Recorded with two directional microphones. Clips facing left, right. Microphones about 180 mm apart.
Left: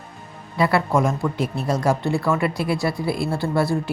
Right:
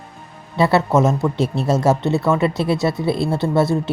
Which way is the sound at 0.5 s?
25° right (ahead or behind).